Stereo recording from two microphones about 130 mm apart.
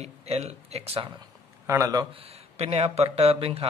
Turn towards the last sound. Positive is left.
turn(degrees=-50)  # may be behind; listen again after turning